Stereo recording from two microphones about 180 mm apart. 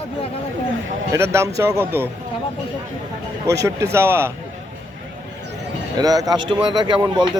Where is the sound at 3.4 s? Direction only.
20° right (ahead or behind).